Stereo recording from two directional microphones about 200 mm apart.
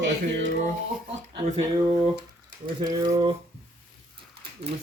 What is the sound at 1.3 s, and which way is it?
Speech, 30° right (ahead or behind).